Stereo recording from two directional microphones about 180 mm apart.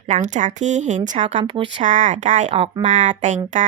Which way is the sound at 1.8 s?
45° right (ahead or behind).